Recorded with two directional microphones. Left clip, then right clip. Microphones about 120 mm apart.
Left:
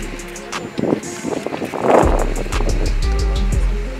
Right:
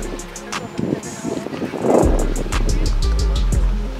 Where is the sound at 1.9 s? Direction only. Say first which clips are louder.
Left 3 dB; 25° left (ahead or behind).